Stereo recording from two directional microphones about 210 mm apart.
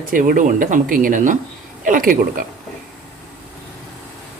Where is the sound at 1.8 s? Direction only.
40° right (ahead or behind).